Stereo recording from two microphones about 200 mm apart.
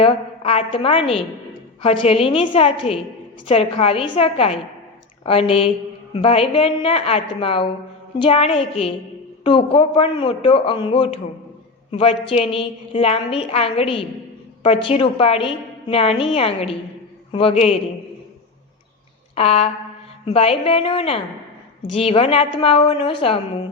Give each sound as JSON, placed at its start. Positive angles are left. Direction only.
{"t": 0.0, "sound": "a woman's voice", "side_deg": 30}
{"t": 19.3, "sound": "a sound", "side_deg": 30}
{"t": 20.2, "sound": "a woman's voice", "side_deg": 30}